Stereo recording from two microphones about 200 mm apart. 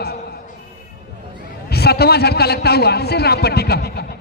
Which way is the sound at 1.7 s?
55° left (ahead or behind).